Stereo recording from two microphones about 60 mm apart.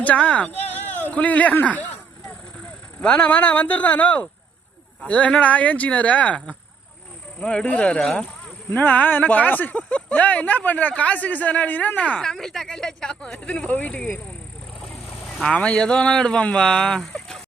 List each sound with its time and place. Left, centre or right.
0.0 s speech: left
3.0 s speech: centre
12.2 s speech: centre; by 14.1 s left
14.8 s a sound: centre
15.4 s speech: centre
17.2 s a sound: centre